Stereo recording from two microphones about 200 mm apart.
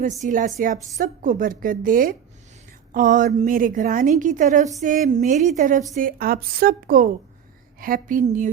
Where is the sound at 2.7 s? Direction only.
40° right (ahead or behind).